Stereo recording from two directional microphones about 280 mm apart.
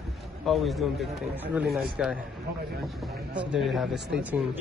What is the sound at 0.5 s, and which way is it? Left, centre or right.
Speech, centre.